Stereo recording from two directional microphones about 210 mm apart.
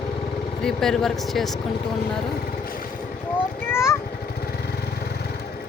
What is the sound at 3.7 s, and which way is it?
Vehicle, 10° left (ahead or behind).